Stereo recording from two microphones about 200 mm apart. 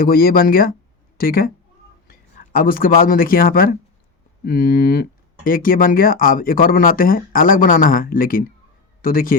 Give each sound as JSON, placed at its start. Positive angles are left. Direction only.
{"t": 0.0, "sound": "speech", "side_deg": 50}